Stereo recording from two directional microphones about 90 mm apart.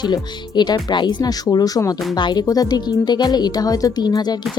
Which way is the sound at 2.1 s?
55° left (ahead or behind).